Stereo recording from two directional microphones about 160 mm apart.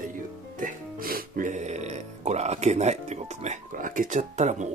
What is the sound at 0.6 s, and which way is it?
Speech, 65° right (ahead or behind).